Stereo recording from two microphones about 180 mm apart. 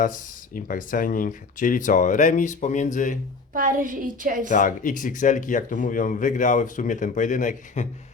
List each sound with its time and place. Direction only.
0.0 s speech: 50° left (ahead or behind)
3.5 s a woman's voice: 50° right (ahead or behind)
4.4 s speech: 45° left (ahead or behind)